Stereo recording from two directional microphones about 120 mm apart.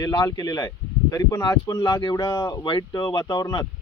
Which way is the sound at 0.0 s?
35° left (ahead or behind).